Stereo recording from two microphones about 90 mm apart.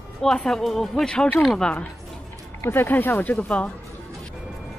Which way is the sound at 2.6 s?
25° left (ahead or behind).